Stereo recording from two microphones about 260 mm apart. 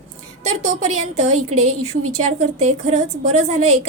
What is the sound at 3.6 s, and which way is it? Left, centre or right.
Speech, right.